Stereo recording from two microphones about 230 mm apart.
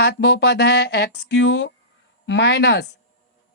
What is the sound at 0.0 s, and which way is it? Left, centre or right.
Speech, left.